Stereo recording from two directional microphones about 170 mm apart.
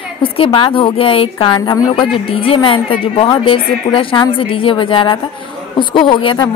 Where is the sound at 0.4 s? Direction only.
30° left (ahead or behind).